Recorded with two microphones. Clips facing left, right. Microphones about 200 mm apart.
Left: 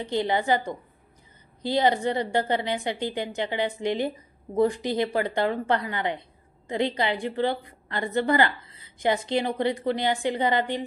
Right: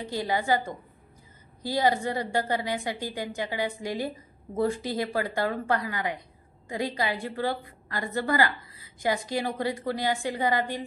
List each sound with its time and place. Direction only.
0.0 s a woman's voice: 25° left (ahead or behind)